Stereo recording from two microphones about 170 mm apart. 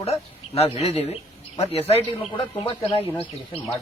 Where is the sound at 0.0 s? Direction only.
35° left (ahead or behind).